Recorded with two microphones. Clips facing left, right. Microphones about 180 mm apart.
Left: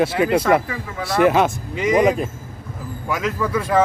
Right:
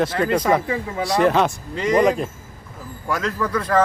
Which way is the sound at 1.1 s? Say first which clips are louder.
Left 2 dB; 5° left (ahead or behind).